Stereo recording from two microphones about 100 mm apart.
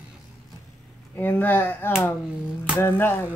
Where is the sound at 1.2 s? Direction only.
20° left (ahead or behind).